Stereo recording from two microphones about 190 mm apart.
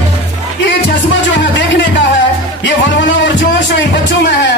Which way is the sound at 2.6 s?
75° left (ahead or behind).